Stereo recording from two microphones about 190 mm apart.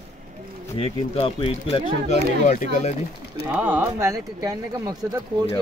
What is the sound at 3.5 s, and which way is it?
Speech, 10° right (ahead or behind).